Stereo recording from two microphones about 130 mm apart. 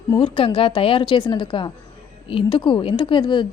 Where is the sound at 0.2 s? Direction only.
45° left (ahead or behind).